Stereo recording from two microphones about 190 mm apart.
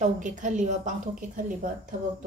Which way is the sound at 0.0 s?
40° right (ahead or behind).